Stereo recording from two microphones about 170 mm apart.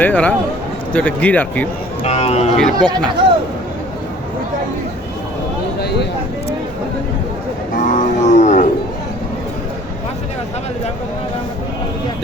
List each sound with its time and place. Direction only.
0.0 s speech: 10° left (ahead or behind)
2.0 s speech: 35° left (ahead or behind)
2.6 s speech: 5° left (ahead or behind)
7.8 s wild animals: 50° left (ahead or behind)